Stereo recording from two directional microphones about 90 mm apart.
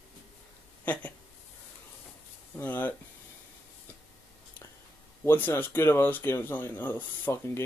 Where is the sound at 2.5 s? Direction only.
20° left (ahead or behind).